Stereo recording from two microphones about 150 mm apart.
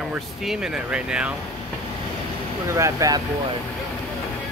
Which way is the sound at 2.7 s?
20° right (ahead or behind).